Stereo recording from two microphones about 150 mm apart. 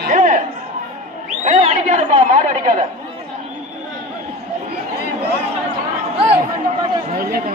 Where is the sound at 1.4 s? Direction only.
50° right (ahead or behind).